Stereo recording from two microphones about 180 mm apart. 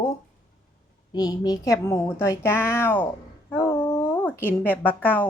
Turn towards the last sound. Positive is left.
turn(degrees=10)  # may be behind; listen again after turning